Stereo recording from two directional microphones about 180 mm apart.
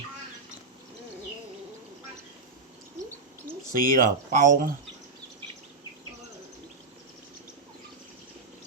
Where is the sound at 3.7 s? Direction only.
50° right (ahead or behind).